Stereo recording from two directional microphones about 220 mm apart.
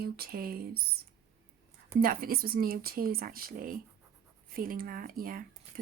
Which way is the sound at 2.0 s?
40° right (ahead or behind).